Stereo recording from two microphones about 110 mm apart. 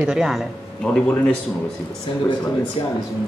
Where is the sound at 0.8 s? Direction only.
10° left (ahead or behind).